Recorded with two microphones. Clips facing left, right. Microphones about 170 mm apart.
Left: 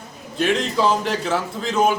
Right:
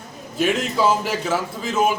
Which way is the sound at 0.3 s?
5° right (ahead or behind).